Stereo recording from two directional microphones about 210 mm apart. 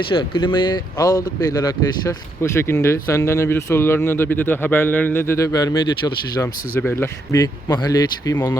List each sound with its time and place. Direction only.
0.1 s speech: 25° left (ahead or behind)